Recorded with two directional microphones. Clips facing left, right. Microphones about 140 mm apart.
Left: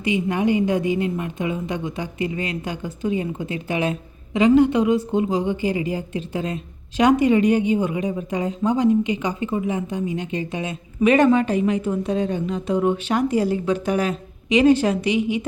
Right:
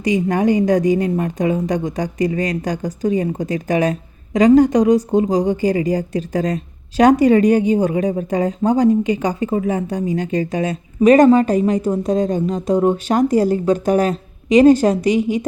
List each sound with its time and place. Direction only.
0.0 s a woman's voice: 40° right (ahead or behind)